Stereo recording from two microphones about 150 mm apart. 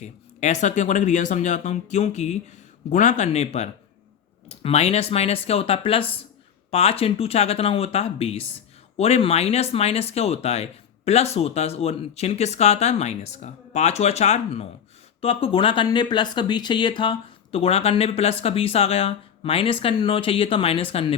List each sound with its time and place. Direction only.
0.0 s speech: 50° left (ahead or behind)